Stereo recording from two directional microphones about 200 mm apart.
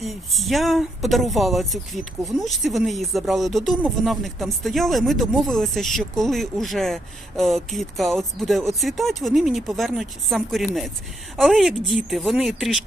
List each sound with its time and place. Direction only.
0.0 s speech: centre (ahead or behind)